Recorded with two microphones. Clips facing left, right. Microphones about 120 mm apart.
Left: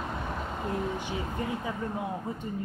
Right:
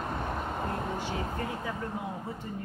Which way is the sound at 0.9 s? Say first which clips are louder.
Even; 20° left (ahead or behind).